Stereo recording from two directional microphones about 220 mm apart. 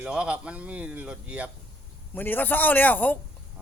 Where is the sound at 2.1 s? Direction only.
10° left (ahead or behind).